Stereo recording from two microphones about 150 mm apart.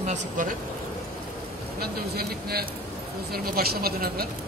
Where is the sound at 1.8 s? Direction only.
90° right.